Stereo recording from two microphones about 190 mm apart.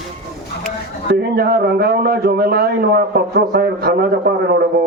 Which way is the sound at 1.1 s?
55° right (ahead or behind).